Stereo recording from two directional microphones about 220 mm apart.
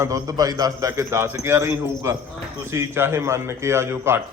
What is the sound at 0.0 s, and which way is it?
A man's voice, 15° right (ahead or behind).